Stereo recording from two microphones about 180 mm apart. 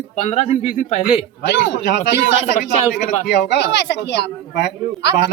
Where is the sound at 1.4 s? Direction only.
80° left.